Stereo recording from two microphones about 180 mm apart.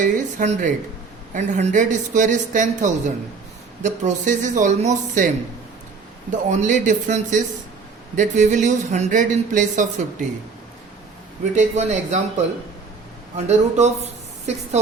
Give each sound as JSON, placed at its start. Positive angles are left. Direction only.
{"t": 0.0, "sound": "speech", "side_deg": -40}
{"t": 6.5, "sound": "speech", "side_deg": -45}
{"t": 11.5, "sound": "a man's voice", "side_deg": -40}
{"t": 13.3, "sound": "speech", "side_deg": -40}